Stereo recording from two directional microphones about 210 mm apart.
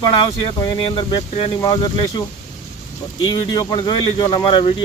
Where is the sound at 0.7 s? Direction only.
25° left (ahead or behind).